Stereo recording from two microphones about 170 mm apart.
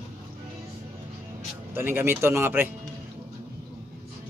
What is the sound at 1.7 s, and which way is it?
Speech, 15° right (ahead or behind).